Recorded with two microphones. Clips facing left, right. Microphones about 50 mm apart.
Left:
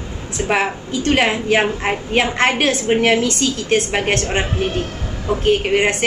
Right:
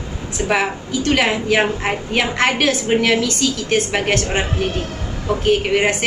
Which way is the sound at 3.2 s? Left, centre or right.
Left.